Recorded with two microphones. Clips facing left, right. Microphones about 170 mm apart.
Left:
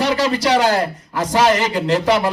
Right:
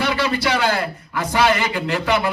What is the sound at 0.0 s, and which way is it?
A man's voice, 40° left (ahead or behind).